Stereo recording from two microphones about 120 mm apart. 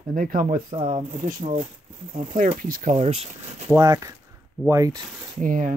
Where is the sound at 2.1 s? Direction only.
85° right; by 3.7 s 60° right (ahead or behind).